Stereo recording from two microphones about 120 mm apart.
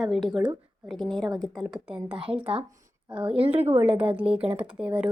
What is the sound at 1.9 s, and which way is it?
Speech, 45° right (ahead or behind).